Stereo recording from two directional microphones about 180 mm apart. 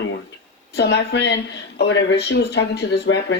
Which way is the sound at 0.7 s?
70° left (ahead or behind).